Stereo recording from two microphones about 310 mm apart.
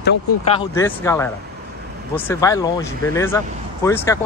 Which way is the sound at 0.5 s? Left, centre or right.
Centre.